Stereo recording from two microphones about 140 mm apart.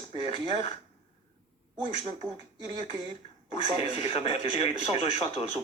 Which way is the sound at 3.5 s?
40° left (ahead or behind).